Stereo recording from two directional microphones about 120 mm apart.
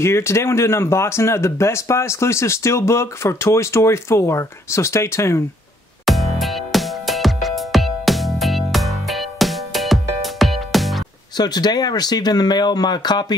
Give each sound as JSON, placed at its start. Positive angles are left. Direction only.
{"t": 0.0, "sound": "speech", "side_deg": 20}
{"t": 6.0, "sound": "music", "side_deg": 0}
{"t": 11.3, "sound": "speech", "side_deg": 35}